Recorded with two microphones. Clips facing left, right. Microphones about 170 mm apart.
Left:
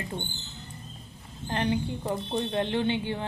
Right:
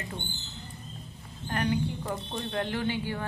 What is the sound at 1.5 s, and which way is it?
A woman's voice, 25° left (ahead or behind).